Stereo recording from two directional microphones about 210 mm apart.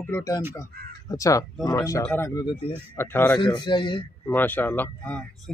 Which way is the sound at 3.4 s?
20° left (ahead or behind).